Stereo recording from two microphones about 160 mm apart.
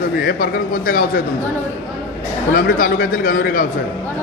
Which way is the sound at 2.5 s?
60° left (ahead or behind).